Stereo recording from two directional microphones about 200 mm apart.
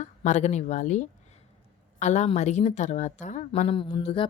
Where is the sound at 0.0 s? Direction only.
35° left (ahead or behind).